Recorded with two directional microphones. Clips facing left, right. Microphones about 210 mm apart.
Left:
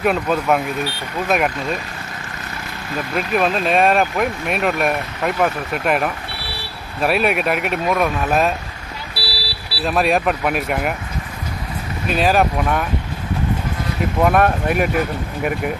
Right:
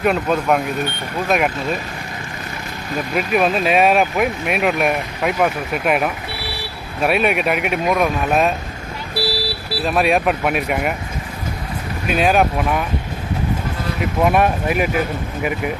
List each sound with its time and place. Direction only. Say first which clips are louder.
0.0 s speech: right 1 dB; centre (ahead or behind)
3.2 s speech: right 1 dB; 5° right (ahead or behind)
9.1 s vehicle: right 10 dB; 50° right (ahead or behind)
9.8 s speech: even; centre (ahead or behind)
12.1 s speech: right 1 dB; centre (ahead or behind)
14.2 s speech: even; centre (ahead or behind)